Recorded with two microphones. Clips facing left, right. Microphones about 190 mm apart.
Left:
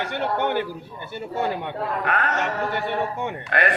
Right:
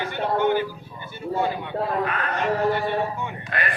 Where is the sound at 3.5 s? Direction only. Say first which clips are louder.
Left 7 dB; 70° left (ahead or behind).